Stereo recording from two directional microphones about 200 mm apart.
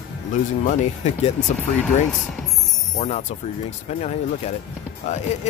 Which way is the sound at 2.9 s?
35° left (ahead or behind).